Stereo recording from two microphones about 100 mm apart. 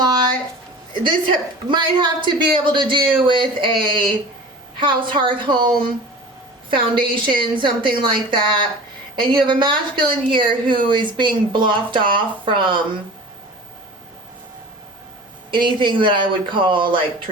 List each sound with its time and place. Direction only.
0.0 s a sound: 45° right (ahead or behind)
1.0 s a woman's voice: 50° right (ahead or behind)
15.4 s a woman's voice: 55° right (ahead or behind)